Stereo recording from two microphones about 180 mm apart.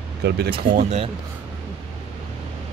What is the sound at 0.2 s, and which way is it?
Speech, 65° right (ahead or behind).